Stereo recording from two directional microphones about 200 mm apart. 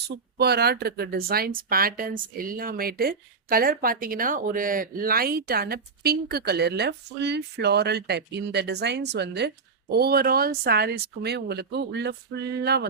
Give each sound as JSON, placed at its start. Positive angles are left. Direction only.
{"t": 0.3, "sound": "speech", "side_deg": -55}